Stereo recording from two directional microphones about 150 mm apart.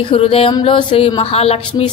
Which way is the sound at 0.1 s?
40° left (ahead or behind).